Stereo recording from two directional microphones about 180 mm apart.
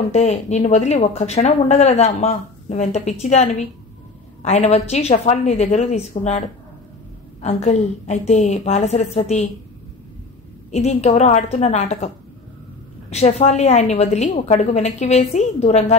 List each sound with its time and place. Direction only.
0.1 s speech: 40° left (ahead or behind)
7.4 s speech: 40° left (ahead or behind)
10.7 s speech: 40° left (ahead or behind)
13.1 s speech: 35° left (ahead or behind)